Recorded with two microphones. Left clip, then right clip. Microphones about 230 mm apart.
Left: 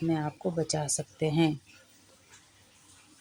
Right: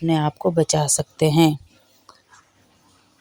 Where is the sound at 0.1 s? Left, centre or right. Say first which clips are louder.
Right 15 dB; right.